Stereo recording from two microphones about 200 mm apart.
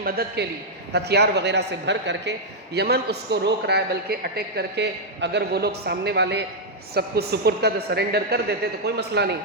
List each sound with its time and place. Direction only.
0.0 s a man's voice: 50° right (ahead or behind)